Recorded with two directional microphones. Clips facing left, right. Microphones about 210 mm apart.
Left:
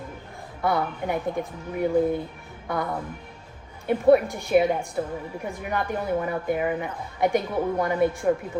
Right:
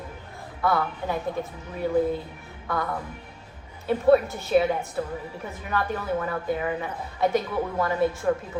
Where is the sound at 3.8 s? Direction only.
15° left (ahead or behind).